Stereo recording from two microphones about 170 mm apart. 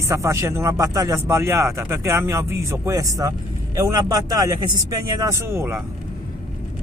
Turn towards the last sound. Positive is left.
turn(degrees=-15)  # may be behind; listen again after turning